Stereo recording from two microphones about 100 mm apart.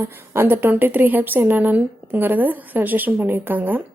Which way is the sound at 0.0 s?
25° right (ahead or behind).